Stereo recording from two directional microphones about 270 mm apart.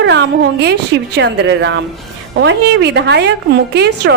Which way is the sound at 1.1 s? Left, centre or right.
Right.